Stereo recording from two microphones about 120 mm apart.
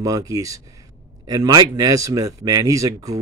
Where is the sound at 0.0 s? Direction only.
30° right (ahead or behind).